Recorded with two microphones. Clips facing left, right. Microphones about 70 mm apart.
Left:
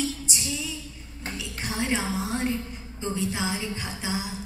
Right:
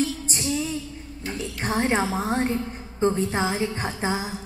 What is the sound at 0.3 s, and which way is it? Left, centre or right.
Music, right.